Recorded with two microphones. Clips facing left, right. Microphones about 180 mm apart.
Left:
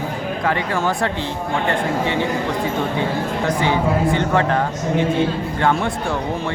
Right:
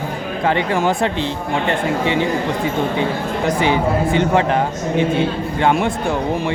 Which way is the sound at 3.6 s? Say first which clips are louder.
Right 1 dB; 20° right (ahead or behind).